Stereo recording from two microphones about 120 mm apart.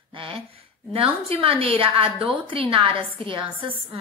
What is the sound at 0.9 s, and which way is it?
A woman's voice, 50° right (ahead or behind).